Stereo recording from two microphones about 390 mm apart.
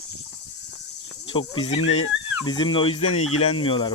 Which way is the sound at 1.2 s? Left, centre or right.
Centre.